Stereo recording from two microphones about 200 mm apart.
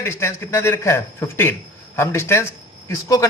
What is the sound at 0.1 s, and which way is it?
Speech, 15° left (ahead or behind).